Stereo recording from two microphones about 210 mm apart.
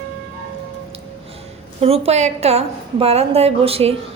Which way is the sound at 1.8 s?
30° right (ahead or behind).